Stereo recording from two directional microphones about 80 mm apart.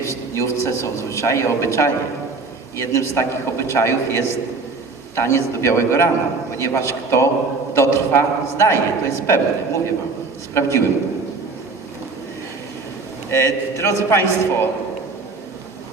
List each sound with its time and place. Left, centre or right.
0.0 s a man's voice: left
13.3 s a man's voice: left